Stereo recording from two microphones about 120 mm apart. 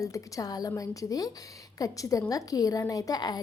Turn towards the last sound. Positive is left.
turn(degrees=35)  # may be behind; listen again after turning